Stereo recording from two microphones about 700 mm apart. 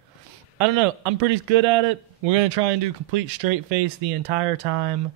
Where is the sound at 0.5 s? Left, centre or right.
Right.